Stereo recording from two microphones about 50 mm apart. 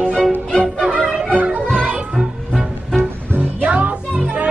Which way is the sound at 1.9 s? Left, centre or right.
Centre.